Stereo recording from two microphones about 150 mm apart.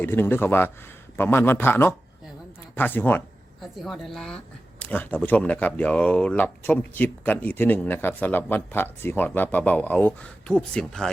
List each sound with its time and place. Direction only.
0.0 s speech: 15° left (ahead or behind)
3.6 s a woman's voice: centre (ahead or behind)